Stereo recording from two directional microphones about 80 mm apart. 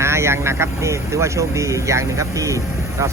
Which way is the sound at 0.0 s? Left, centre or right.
Right.